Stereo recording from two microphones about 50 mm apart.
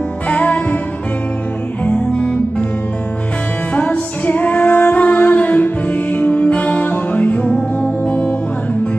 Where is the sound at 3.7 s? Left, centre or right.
Left.